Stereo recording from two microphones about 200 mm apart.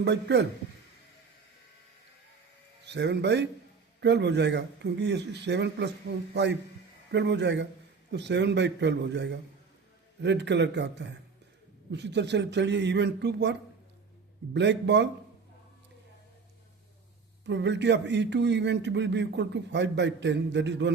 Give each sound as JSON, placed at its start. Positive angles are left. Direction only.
{"t": 0.0, "sound": "a man's voice", "side_deg": -60}
{"t": 2.8, "sound": "a man's voice", "side_deg": -60}
{"t": 17.4, "sound": "a man's voice", "side_deg": -60}